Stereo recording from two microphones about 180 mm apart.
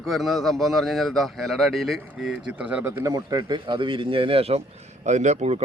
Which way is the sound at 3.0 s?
20° right (ahead or behind).